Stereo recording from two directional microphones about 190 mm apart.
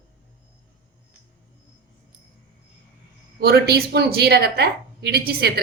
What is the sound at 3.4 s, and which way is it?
A woman's voice, 55° right (ahead or behind).